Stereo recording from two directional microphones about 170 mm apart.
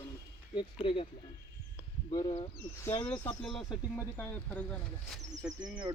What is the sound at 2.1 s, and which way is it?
Speech, 30° left (ahead or behind).